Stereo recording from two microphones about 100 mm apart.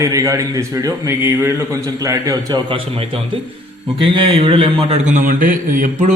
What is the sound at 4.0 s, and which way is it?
A man's voice, 60° right (ahead or behind).